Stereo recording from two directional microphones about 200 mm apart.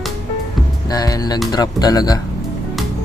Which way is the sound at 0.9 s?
20° left (ahead or behind).